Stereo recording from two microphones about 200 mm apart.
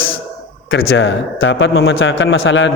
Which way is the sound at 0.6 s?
70° left (ahead or behind).